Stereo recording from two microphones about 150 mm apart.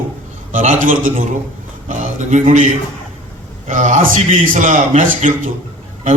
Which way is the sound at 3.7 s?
55° right (ahead or behind).